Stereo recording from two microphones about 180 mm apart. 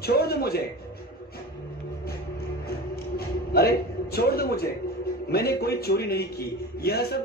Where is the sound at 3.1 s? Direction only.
60° left (ahead or behind).